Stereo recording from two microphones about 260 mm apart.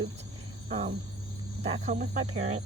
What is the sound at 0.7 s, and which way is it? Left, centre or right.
Cricket, right.